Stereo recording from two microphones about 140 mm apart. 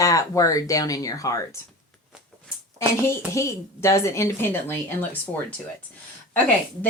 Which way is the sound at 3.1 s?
20° left (ahead or behind).